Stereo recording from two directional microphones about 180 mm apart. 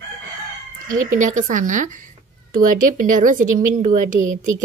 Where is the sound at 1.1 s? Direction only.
45° right (ahead or behind).